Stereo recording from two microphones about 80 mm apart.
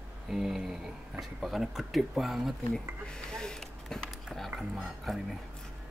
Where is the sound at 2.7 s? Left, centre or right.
Centre.